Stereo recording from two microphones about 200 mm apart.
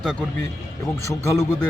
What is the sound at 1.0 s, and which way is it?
Speech, 15° left (ahead or behind).